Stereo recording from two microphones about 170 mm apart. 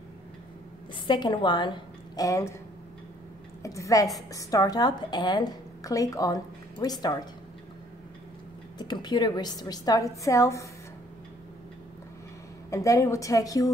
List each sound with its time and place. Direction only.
1.0 s a woman's voice: 25° left (ahead or behind)
3.6 s a woman's voice: 20° left (ahead or behind)
8.7 s a woman's voice: 25° left (ahead or behind)
12.6 s a woman's voice: 20° left (ahead or behind)